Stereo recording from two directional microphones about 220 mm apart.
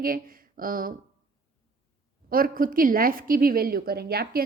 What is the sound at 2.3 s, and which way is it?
A woman's voice, 40° right (ahead or behind).